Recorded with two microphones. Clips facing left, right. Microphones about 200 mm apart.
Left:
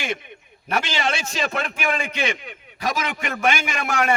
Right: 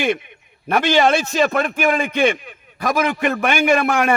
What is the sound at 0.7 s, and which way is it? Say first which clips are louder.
A man's voice: right 9 dB; 55° right (ahead or behind).